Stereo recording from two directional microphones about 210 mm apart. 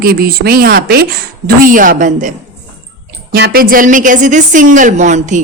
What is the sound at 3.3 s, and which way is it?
Speech, 45° right (ahead or behind).